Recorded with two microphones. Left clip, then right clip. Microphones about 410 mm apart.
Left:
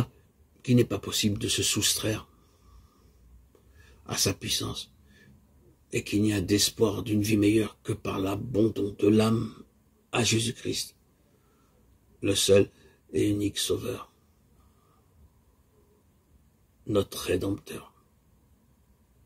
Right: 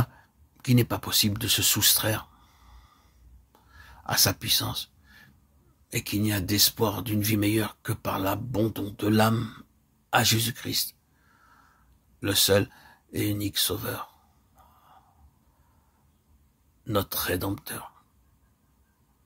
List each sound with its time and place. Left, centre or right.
0.6 s speech: right
3.8 s a sound: right
5.9 s speech: right
12.2 s speech: right
16.8 s speech: right